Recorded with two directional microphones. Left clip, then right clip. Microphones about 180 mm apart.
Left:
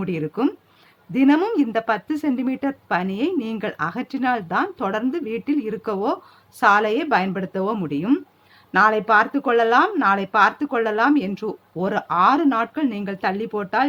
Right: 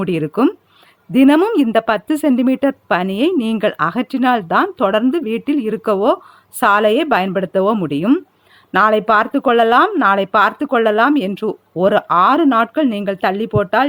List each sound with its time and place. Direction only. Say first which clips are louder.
0.0 s speech: right 7 dB; 45° right (ahead or behind)